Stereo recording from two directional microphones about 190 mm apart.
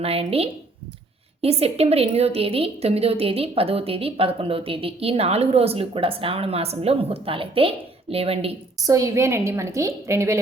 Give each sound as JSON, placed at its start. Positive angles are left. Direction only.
{"t": 0.0, "sound": "a woman's voice", "side_deg": -30}
{"t": 8.8, "sound": "a woman's voice", "side_deg": -15}